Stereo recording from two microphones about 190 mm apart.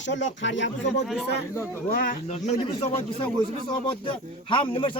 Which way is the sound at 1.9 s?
45° left (ahead or behind).